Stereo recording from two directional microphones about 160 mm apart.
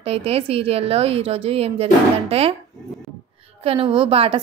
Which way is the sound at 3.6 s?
35° right (ahead or behind).